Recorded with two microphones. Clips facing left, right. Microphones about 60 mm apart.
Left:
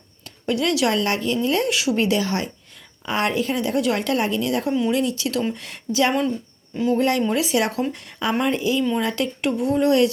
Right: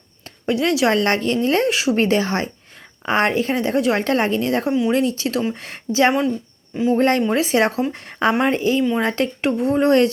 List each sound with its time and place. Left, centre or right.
0.3 s speech: right
0.9 s a woman's voice: right
7.2 s a woman's voice: right